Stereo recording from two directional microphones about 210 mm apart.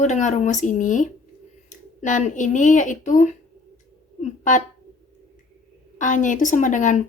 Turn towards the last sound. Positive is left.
turn(degrees=35)  # may be behind; listen again after turning